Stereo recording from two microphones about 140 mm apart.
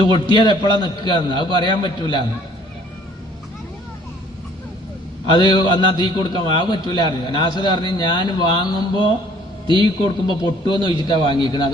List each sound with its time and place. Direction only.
0.1 s a man's voice: 30° left (ahead or behind)
5.2 s a man's voice: 35° left (ahead or behind)